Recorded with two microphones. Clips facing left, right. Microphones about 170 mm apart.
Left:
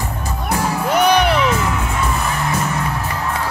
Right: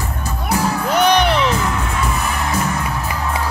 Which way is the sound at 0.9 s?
10° left (ahead or behind).